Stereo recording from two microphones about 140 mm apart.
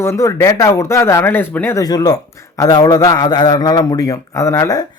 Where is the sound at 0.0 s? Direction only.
20° left (ahead or behind).